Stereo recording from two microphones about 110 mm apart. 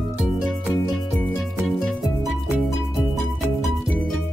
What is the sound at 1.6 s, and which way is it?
Music, centre (ahead or behind).